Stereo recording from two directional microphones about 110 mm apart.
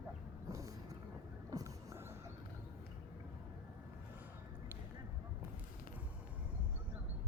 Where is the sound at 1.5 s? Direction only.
30° right (ahead or behind).